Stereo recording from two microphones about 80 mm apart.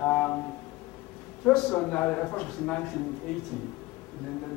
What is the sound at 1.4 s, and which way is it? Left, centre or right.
Speech, centre.